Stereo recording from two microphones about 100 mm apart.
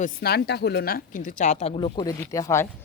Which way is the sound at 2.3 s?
30° left (ahead or behind).